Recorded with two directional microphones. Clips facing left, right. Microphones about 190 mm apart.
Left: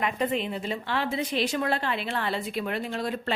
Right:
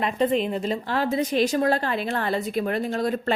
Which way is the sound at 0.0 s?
35° right (ahead or behind).